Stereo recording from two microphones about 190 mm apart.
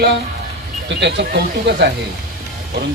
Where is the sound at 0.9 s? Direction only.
65° right (ahead or behind).